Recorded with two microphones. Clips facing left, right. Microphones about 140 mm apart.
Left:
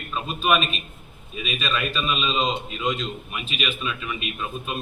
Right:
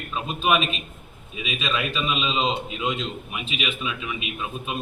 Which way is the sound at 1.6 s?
15° right (ahead or behind).